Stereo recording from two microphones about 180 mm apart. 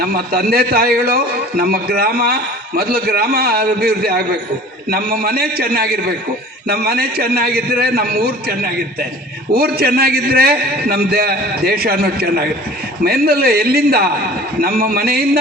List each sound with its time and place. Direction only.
0.0 s a man's voice: 55° right (ahead or behind)